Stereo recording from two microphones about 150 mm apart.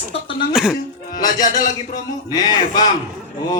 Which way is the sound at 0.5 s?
5° right (ahead or behind).